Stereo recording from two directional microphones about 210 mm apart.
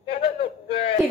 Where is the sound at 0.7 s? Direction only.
30° left (ahead or behind).